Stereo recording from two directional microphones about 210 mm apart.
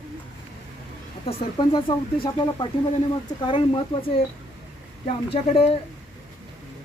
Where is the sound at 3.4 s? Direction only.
25° left (ahead or behind).